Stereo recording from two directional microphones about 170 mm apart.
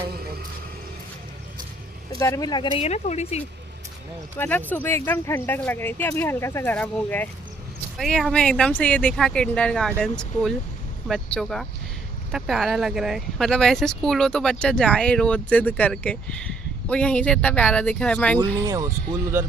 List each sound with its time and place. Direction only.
2.2 s speech: 20° left (ahead or behind)
2.8 s speech: 40° left (ahead or behind)
4.4 s speech: 10° left (ahead or behind)
18.3 s speech: 20° right (ahead or behind)